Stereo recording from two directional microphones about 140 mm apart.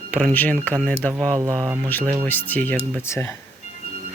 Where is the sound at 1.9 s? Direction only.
15° left (ahead or behind).